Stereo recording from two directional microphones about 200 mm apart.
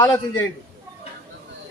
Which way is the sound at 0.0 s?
15° left (ahead or behind).